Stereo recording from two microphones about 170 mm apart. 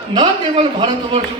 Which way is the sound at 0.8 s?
25° right (ahead or behind).